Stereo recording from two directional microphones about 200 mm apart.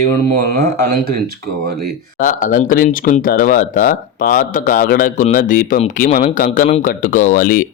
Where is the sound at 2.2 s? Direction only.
40° left (ahead or behind).